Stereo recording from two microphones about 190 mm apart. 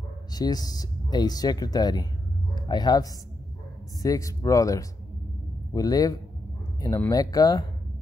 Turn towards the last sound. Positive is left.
turn(degrees=20)  # may be behind; listen again after turning